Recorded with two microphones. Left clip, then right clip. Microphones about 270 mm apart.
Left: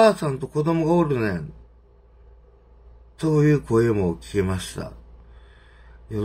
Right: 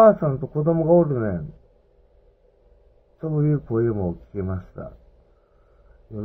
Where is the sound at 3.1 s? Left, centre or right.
Left.